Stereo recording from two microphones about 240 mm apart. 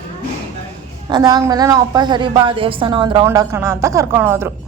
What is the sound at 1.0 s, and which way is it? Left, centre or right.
A woman's voice, centre.